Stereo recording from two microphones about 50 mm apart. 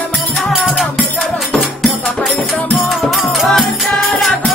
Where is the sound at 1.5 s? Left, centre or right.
Centre.